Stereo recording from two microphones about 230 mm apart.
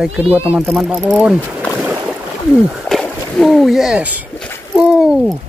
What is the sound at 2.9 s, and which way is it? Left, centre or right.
Speech, centre.